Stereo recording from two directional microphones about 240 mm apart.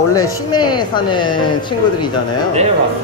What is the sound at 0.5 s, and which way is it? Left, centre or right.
Speech, centre.